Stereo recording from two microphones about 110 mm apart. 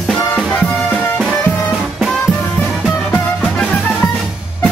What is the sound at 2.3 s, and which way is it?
Music, 10° left (ahead or behind).